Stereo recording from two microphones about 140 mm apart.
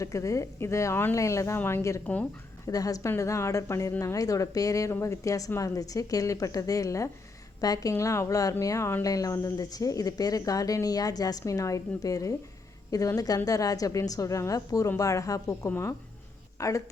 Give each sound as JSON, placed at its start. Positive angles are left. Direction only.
{"t": 0.0, "sound": "a woman's voice", "side_deg": 20}